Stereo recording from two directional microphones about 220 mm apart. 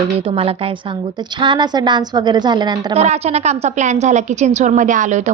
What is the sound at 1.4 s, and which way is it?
A woman's voice, 20° right (ahead or behind).